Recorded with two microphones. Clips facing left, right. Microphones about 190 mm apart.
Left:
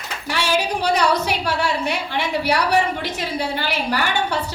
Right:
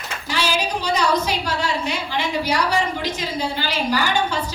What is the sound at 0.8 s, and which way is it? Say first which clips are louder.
A woman's voice: even; 65° left (ahead or behind).